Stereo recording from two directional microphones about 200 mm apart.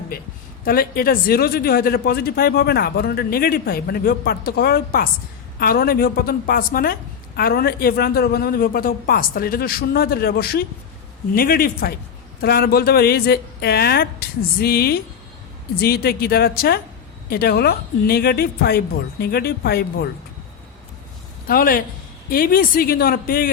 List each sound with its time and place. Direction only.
0.6 s a man's voice: 45° left (ahead or behind)
21.4 s a man's voice: 45° left (ahead or behind)